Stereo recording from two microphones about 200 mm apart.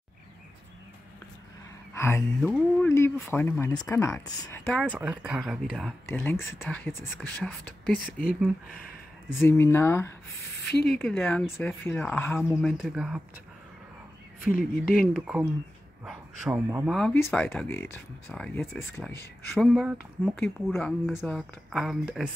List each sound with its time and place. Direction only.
2.0 s speech: 10° left (ahead or behind)
4.6 s speech: centre (ahead or behind)
6.0 s speech: 10° left (ahead or behind)
9.4 s speech: 10° left (ahead or behind); by 13.2 s 5° right (ahead or behind)
14.5 s speech: 45° left (ahead or behind)
15.1 s a man's voice: 5° right (ahead or behind)
16.9 s speech: 5° left (ahead or behind)
19.5 s speech: centre (ahead or behind)